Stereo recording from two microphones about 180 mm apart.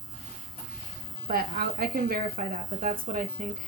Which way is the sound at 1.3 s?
55° right (ahead or behind).